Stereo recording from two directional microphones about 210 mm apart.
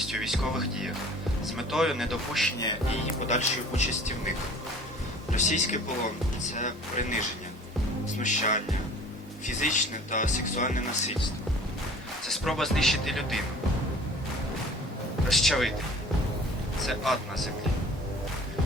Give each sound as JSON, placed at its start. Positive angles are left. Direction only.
{"t": 0.0, "sound": "speech", "side_deg": 0}
{"t": 3.2, "sound": "speech", "side_deg": 35}
{"t": 5.3, "sound": "speech", "side_deg": 35}
{"t": 12.3, "sound": "speech", "side_deg": 0}
{"t": 15.3, "sound": "speech", "side_deg": 0}
{"t": 16.8, "sound": "speech", "side_deg": 0}